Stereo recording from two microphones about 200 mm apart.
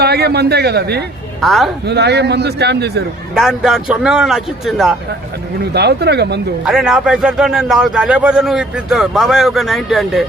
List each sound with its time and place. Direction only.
0.0 s a man's voice: 55° right (ahead or behind)
1.4 s a man's voice: centre (ahead or behind)
1.9 s a man's voice: 55° right (ahead or behind)
3.3 s a man's voice: centre (ahead or behind)
5.7 s a man's voice: 55° right (ahead or behind)
6.7 s a man's voice: centre (ahead or behind)